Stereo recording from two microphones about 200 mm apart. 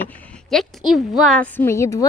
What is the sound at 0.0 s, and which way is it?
A woman's voice, 10° left (ahead or behind).